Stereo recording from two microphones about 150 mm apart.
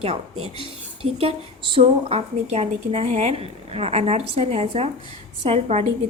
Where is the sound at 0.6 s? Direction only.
40° right (ahead or behind).